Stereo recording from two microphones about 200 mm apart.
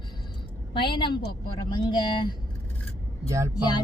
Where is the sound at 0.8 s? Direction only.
25° left (ahead or behind).